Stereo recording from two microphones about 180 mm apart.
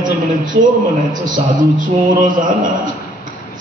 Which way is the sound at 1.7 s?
45° right (ahead or behind).